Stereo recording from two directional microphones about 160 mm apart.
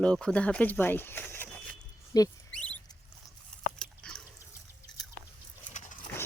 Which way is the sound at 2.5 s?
10° left (ahead or behind).